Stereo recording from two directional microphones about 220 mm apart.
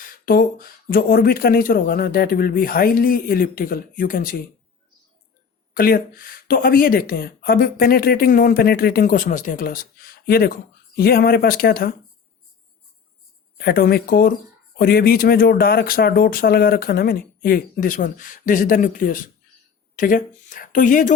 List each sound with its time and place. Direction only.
0.0 s speech: 40° left (ahead or behind)
5.7 s speech: 40° left (ahead or behind)
13.6 s speech: 45° left (ahead or behind)